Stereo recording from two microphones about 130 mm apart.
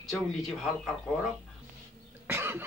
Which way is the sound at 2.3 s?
20° right (ahead or behind).